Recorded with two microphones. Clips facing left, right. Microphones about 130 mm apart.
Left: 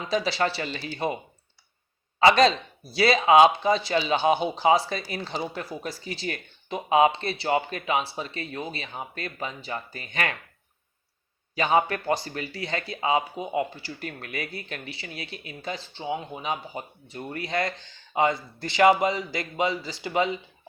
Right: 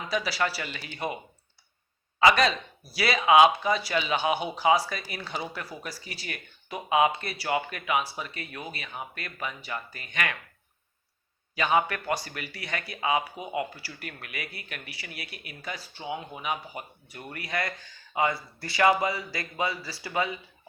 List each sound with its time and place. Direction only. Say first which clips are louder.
0.1 s speech: left 4 dB; 25° left (ahead or behind)
11.5 s speech: left 2 dB; 30° left (ahead or behind)